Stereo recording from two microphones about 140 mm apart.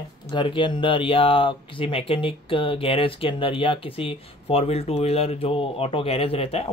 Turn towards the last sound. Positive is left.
turn(degrees=45)  # may be behind; listen again after turning